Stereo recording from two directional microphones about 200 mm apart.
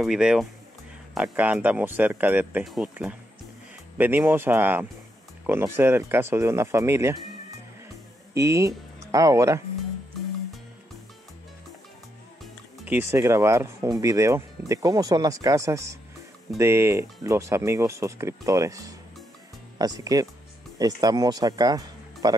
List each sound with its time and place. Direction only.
0.0 s speech: 5° right (ahead or behind)
8.4 s speech: 15° right (ahead or behind)
12.7 s speech: 10° right (ahead or behind)